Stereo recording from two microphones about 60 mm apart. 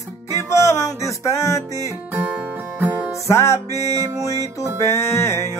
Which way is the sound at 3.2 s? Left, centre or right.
Left.